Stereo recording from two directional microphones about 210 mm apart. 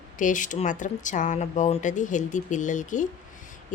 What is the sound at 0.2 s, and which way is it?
Speech, 40° left (ahead or behind).